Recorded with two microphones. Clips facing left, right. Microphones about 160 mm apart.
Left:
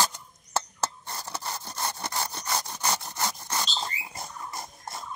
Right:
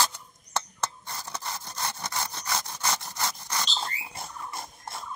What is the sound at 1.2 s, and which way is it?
Sawing, 5° left (ahead or behind).